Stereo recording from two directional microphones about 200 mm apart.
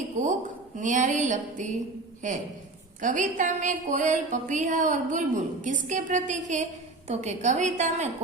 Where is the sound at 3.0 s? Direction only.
40° right (ahead or behind).